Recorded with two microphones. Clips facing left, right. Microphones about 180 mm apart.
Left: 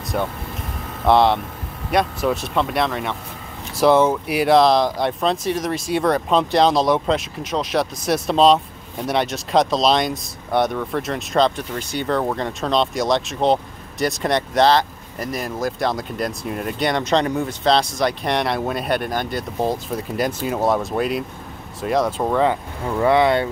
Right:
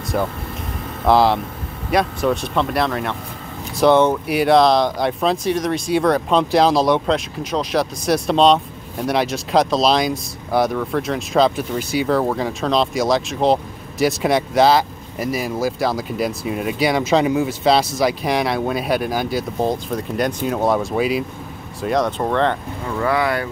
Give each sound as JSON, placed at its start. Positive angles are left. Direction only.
{"t": 0.1, "sound": "speech", "side_deg": 0}
{"t": 22.9, "sound": "speech", "side_deg": 25}